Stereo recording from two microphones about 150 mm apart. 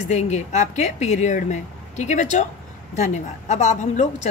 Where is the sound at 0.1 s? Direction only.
50° left (ahead or behind).